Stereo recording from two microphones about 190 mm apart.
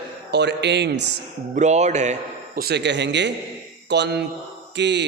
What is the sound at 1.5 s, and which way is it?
A man's voice, 40° right (ahead or behind).